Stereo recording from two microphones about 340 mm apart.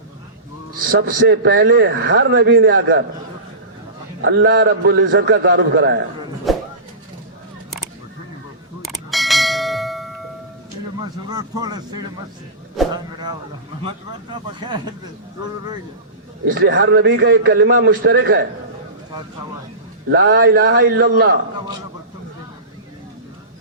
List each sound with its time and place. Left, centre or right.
0.9 s a man's voice: right
4.2 s a man's voice: right
6.5 s a sound: centre
8.8 s bell: centre
11.0 s vehicle: centre
12.9 s a sound: centre
13.8 s speech: centre
16.5 s a man's voice: right
20.1 s a man's voice: right